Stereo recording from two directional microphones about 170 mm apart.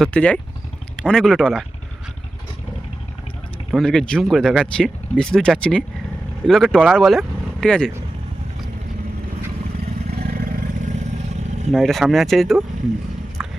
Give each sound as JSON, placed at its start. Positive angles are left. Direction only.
{"t": 0.0, "sound": "speech", "side_deg": 5}
{"t": 3.7, "sound": "speech", "side_deg": 0}
{"t": 10.1, "sound": "vehicle", "side_deg": -60}
{"t": 11.7, "sound": "speech", "side_deg": 0}
{"t": 13.4, "sound": "a sound", "side_deg": -5}